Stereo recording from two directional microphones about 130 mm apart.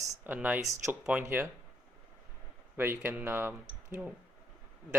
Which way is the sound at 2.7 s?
15° right (ahead or behind).